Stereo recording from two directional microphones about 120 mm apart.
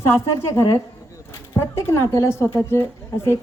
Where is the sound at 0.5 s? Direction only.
25° left (ahead or behind).